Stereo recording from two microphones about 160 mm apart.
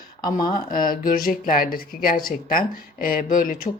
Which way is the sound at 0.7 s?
60° left (ahead or behind).